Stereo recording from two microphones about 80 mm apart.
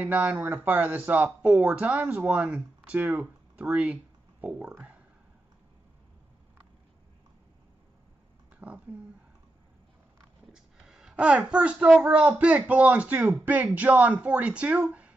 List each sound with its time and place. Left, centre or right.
0.0 s speech: right
8.5 s speech: centre
10.5 s a sound: centre
12.0 s speech: centre